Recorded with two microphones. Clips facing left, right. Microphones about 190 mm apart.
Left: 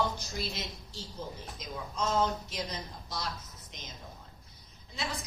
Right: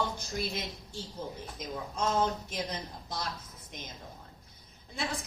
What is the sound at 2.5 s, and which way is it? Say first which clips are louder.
A woman's voice: right 2 dB; 55° right (ahead or behind).